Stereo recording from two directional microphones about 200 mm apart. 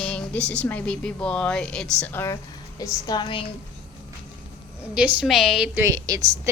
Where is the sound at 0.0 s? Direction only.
5° left (ahead or behind); by 3.4 s 25° left (ahead or behind).